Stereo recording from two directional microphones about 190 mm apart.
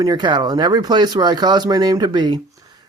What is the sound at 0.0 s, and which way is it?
Speech, 20° right (ahead or behind).